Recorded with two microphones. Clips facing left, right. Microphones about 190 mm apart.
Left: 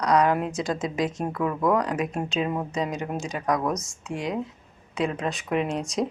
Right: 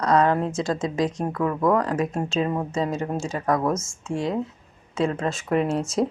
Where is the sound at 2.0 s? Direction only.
25° right (ahead or behind).